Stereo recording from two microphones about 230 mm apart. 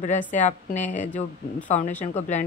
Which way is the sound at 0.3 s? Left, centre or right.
Left.